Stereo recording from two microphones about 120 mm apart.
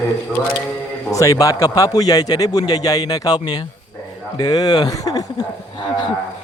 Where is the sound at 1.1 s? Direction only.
30° left (ahead or behind).